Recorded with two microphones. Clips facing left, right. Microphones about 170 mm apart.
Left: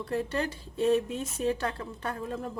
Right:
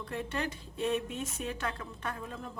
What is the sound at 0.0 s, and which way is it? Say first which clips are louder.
Speech: left 5 dB; 35° left (ahead or behind).